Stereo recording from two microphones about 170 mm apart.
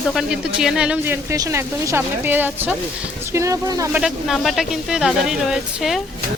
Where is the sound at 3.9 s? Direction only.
5° right (ahead or behind).